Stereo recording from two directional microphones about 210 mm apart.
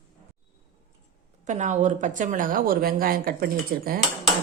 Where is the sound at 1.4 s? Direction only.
35° right (ahead or behind).